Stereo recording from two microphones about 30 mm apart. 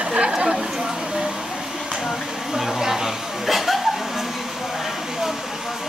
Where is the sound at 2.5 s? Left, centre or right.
Centre.